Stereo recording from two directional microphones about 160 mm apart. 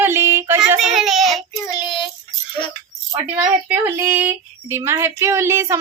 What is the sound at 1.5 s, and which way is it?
Child singing, 25° left (ahead or behind).